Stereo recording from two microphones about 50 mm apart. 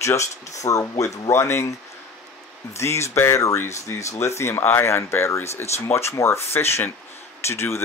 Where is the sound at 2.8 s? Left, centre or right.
Left.